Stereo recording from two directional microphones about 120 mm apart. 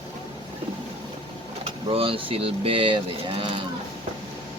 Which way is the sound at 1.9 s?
50° right (ahead or behind).